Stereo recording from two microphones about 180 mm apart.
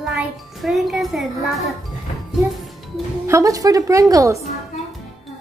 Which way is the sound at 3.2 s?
15° right (ahead or behind).